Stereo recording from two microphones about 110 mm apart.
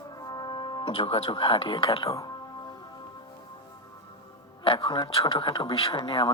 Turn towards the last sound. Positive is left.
turn(degrees=50)  # may be behind; listen again after turning